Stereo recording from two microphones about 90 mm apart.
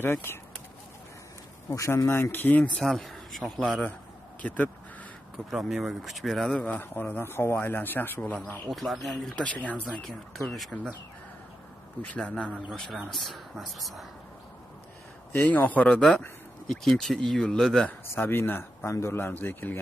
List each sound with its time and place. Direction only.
0.0 s a man's voice: 25° left (ahead or behind)
1.7 s a man's voice: 35° left (ahead or behind); by 2.7 s 20° left (ahead or behind)
2.7 s speech: 5° left (ahead or behind)
4.4 s speech: 15° left (ahead or behind)
5.5 s speech: 5° right (ahead or behind)
6.6 s a man's voice: 20° left (ahead or behind)
8.6 s speech: centre (ahead or behind)
9.4 s speech: 15° left (ahead or behind)
10.3 s speech: centre (ahead or behind)
12.2 s speech: 15° left (ahead or behind)
15.3 s speech: 20° left (ahead or behind)
17.8 s a man's voice: 20° left (ahead or behind)